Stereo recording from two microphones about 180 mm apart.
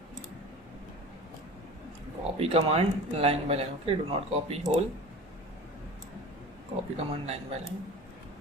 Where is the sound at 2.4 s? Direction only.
35° right (ahead or behind).